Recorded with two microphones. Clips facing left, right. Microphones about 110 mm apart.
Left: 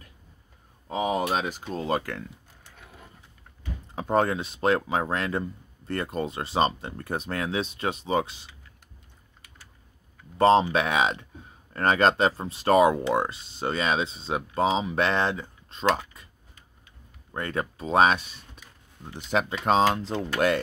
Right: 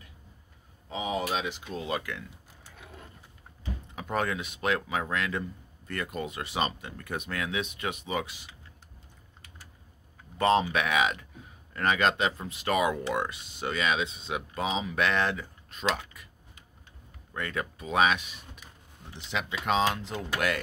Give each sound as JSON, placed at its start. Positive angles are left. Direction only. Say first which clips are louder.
{"t": 0.8, "sound": "speech", "louder": "left 5 dB", "side_deg": 50}
{"t": 3.9, "sound": "speech", "louder": "left 7 dB", "side_deg": 30}
{"t": 10.3, "sound": "speech", "louder": "left 5 dB", "side_deg": 30}
{"t": 17.3, "sound": "speech", "louder": "left 4 dB", "side_deg": 30}